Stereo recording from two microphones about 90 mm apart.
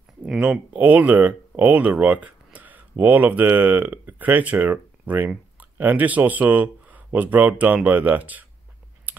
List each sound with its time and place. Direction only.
0.4 s speech: 15° right (ahead or behind)